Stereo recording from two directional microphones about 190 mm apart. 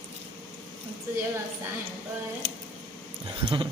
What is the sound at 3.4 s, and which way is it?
Speech, 20° right (ahead or behind).